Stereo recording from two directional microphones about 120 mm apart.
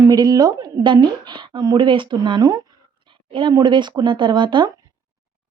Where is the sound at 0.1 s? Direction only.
30° right (ahead or behind).